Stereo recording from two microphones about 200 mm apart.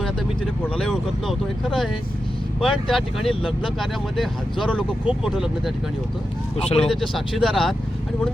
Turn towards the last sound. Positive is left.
turn(degrees=0)  # may be behind; listen again after turning